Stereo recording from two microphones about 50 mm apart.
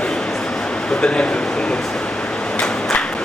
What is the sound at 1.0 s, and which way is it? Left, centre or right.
Speech, left.